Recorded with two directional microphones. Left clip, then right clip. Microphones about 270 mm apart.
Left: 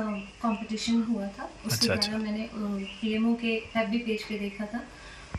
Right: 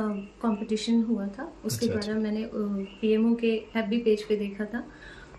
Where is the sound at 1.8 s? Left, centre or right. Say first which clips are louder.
Left 3 dB; centre.